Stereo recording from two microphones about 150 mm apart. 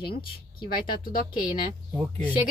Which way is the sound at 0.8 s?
70° left (ahead or behind).